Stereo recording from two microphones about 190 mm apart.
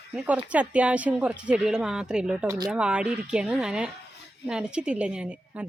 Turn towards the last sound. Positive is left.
turn(degrees=-5)  # may be behind; listen again after turning